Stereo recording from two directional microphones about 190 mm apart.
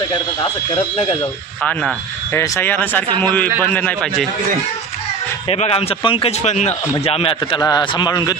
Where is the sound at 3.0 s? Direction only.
25° right (ahead or behind).